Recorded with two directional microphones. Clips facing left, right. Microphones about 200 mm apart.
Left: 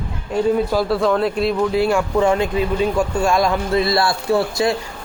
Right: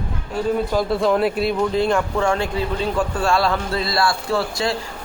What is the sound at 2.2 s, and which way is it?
A man's voice, 20° left (ahead or behind).